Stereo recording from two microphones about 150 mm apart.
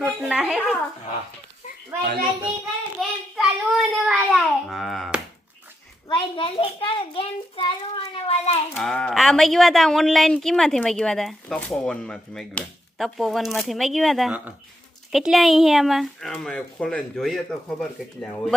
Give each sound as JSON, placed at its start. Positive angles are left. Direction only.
{"t": 0.0, "sound": "speech", "side_deg": -5}
{"t": 3.0, "sound": "a sound", "side_deg": -5}
{"t": 6.1, "sound": "a child's voice", "side_deg": 35}
{"t": 8.8, "sound": "speech", "side_deg": 5}